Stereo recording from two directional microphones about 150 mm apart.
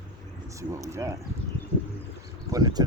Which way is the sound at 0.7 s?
20° right (ahead or behind).